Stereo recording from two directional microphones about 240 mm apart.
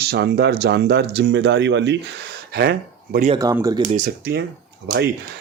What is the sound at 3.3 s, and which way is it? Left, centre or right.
Speech, centre.